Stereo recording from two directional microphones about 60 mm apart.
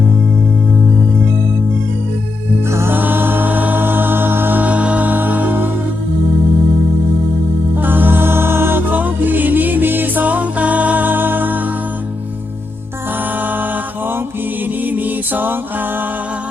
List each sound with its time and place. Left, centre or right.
2.6 s music: right
2.9 s music: right
7.8 s music: right
13.4 s music: right
14.8 s music: right